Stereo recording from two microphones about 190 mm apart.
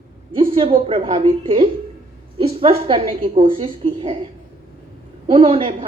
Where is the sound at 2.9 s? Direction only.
25° right (ahead or behind).